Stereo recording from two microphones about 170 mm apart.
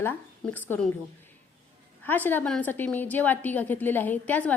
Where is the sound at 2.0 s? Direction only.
10° left (ahead or behind).